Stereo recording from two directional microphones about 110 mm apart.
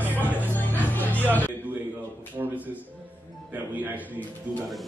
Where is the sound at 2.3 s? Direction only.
15° right (ahead or behind).